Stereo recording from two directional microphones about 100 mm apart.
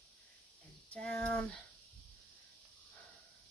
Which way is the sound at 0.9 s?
10° left (ahead or behind).